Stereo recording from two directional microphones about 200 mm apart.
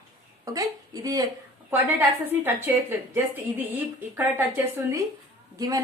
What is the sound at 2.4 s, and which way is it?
A woman's voice, 10° right (ahead or behind).